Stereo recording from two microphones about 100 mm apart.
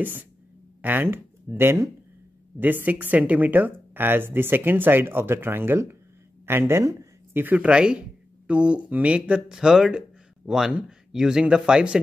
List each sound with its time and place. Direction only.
0.0 s speech: 15° right (ahead or behind)
7.4 s speech: 15° right (ahead or behind)